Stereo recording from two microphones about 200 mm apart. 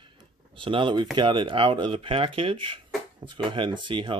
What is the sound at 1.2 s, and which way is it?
Speech, 25° right (ahead or behind).